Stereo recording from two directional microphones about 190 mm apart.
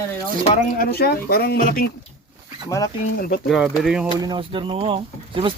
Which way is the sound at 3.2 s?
50° left (ahead or behind).